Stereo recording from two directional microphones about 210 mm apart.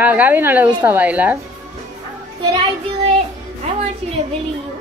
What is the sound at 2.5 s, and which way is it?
Child singing, 25° right (ahead or behind).